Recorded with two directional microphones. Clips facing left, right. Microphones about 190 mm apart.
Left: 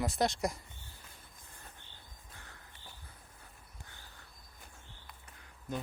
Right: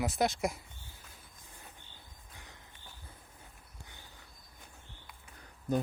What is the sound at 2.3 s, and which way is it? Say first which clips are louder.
Crow: right 1 dB; 15° right (ahead or behind).